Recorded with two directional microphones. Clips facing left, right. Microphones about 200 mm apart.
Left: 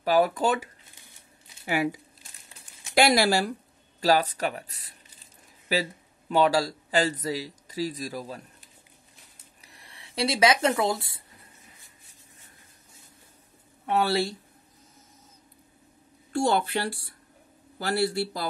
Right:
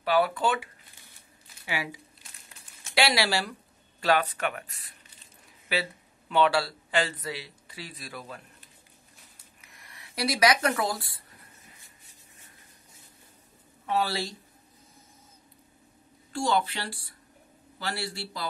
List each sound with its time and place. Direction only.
0.0 s speech: 40° left (ahead or behind)
1.7 s a man's voice: 50° left (ahead or behind)
9.6 s a sound: 30° left (ahead or behind)
13.8 s speech: 60° left (ahead or behind)
16.3 s a man's voice: 55° left (ahead or behind)